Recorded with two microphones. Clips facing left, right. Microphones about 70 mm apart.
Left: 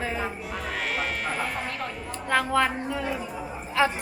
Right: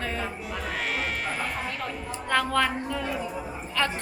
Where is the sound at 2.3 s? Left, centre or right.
Centre.